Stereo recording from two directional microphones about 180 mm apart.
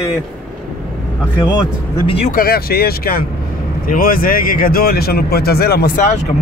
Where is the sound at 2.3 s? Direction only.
55° left (ahead or behind).